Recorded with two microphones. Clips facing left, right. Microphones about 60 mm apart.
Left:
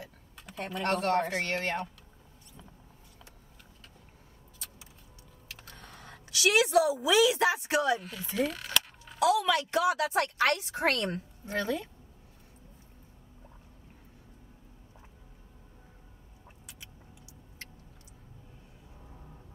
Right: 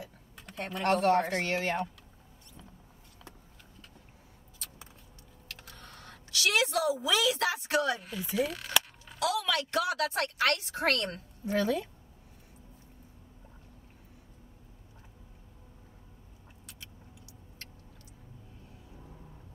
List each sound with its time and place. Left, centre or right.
0.0 s speech: centre
5.8 s a woman's voice: centre
8.0 s speech: centre
9.2 s a woman's voice: left